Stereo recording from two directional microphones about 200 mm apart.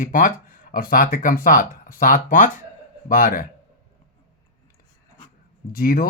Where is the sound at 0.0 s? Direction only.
40° left (ahead or behind).